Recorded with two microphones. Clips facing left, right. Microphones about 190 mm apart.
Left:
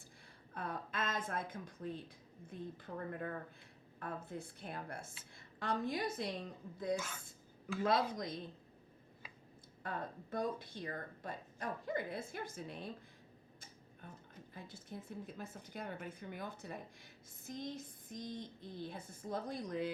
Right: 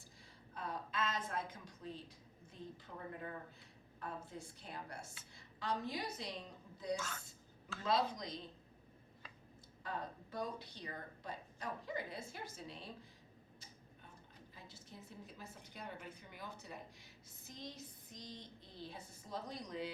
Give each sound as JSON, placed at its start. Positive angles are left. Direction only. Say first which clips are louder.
{"t": 0.5, "sound": "a woman's voice", "louder": "left 1 dB", "side_deg": 55}
{"t": 6.9, "sound": "a woman's voice", "louder": "left 2 dB", "side_deg": 10}
{"t": 7.9, "sound": "speech", "louder": "left 1 dB", "side_deg": 50}
{"t": 9.8, "sound": "speech", "louder": "left 2 dB", "side_deg": 50}
{"t": 14.5, "sound": "a sound", "louder": "left 7 dB", "side_deg": 55}
{"t": 15.4, "sound": "speech", "louder": "left 6 dB", "side_deg": 50}